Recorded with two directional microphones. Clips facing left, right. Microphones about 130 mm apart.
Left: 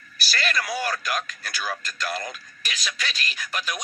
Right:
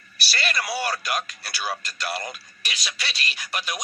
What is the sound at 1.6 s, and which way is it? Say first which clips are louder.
Speech: right 1 dB; 30° right (ahead or behind).